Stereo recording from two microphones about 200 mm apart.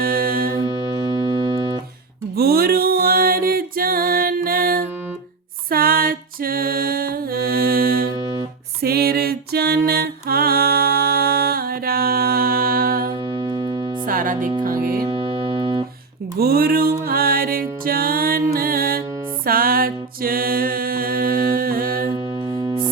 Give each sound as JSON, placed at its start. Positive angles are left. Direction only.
{"t": 0.0, "sound": "music", "side_deg": -45}
{"t": 0.6, "sound": "music", "side_deg": -20}
{"t": 2.3, "sound": "music", "side_deg": -50}
{"t": 8.1, "sound": "music", "side_deg": -20}
{"t": 8.8, "sound": "music", "side_deg": -50}
{"t": 13.2, "sound": "music", "side_deg": -20}
{"t": 14.0, "sound": "music", "side_deg": -45}
{"t": 15.0, "sound": "music", "side_deg": -25}
{"t": 16.4, "sound": "music", "side_deg": -50}
{"t": 22.1, "sound": "music", "side_deg": -20}